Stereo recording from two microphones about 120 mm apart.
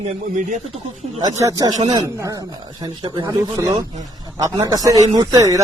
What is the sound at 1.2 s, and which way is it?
Speech, 30° right (ahead or behind).